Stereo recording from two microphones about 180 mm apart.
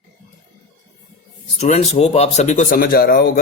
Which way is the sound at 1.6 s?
35° left (ahead or behind).